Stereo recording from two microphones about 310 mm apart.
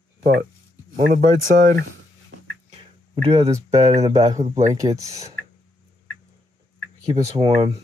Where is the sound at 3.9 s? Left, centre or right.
Right.